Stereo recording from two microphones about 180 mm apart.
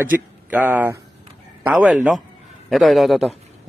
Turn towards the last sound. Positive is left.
turn(degrees=0)  # may be behind; listen again after turning